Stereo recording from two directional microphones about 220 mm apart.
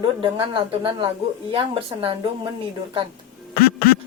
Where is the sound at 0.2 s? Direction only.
25° right (ahead or behind).